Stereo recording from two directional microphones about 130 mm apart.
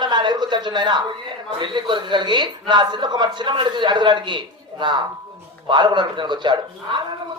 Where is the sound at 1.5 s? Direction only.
35° right (ahead or behind).